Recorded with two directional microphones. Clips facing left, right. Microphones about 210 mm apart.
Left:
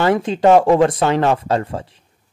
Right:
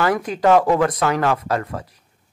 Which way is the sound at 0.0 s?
25° left (ahead or behind).